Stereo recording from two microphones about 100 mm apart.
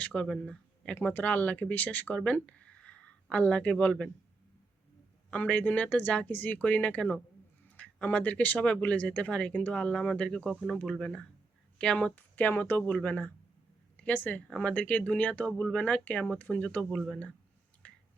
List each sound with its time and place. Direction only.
0.0 s speech: 10° left (ahead or behind)
5.3 s speech: 15° left (ahead or behind)
17.8 s finger snapping: 10° left (ahead or behind)